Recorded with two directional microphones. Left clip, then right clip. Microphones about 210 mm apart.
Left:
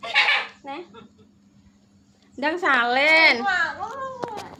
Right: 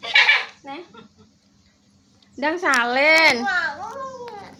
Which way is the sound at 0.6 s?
10° right (ahead or behind).